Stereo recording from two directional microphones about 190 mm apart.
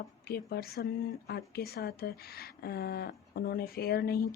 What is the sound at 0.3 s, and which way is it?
Speech, 55° left (ahead or behind).